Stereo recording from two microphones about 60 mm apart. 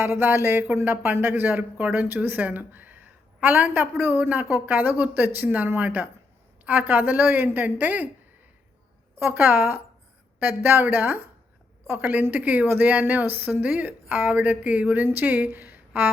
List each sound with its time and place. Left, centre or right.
0.0 s a woman's voice: right
9.1 s a woman's voice: right